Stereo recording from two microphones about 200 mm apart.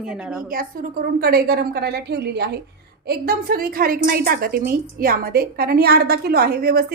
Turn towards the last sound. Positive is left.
turn(degrees=-50)  # may be behind; listen again after turning